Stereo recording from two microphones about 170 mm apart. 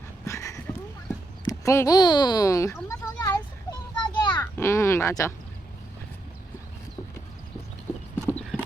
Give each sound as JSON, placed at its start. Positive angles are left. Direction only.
{"t": 0.3, "sound": "a sound", "side_deg": 20}
{"t": 4.5, "sound": "speech", "side_deg": 15}
{"t": 8.1, "sound": "clip-clop", "side_deg": 10}